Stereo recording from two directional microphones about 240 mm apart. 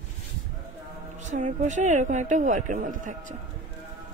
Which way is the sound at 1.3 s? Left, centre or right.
Right.